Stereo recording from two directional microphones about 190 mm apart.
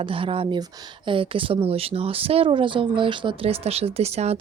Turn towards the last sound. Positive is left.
turn(degrees=-35)  # may be behind; listen again after turning